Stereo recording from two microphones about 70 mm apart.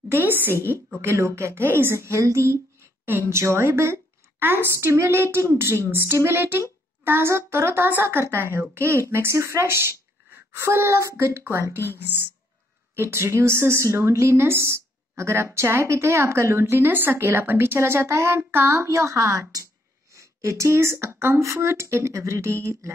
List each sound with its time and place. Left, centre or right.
0.1 s a woman's voice: right
1.0 s a woman's voice: right
12.9 s a woman's voice: right